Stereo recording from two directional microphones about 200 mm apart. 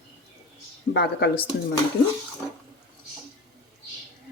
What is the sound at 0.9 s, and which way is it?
Speech, 55° left (ahead or behind).